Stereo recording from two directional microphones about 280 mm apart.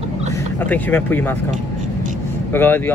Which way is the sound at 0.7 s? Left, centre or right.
Centre.